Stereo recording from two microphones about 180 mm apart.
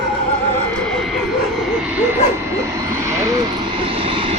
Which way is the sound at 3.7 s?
30° right (ahead or behind).